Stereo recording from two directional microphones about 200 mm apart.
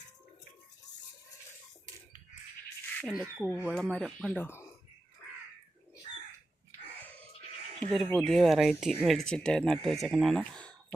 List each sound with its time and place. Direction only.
3.0 s speech: centre (ahead or behind)
7.9 s speech: centre (ahead or behind)